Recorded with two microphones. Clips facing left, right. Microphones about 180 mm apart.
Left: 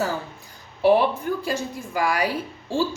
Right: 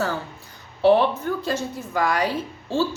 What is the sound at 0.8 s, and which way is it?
A woman's voice, 10° left (ahead or behind).